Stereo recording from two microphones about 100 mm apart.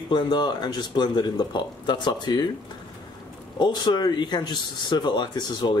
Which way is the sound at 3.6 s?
45° left (ahead or behind).